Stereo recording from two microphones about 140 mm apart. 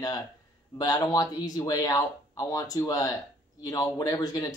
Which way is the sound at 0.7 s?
30° left (ahead or behind).